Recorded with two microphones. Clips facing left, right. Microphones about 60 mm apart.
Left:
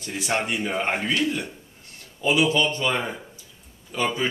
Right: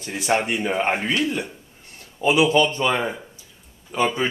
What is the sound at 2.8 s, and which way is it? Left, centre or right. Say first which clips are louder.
Speech: right 3 dB; centre.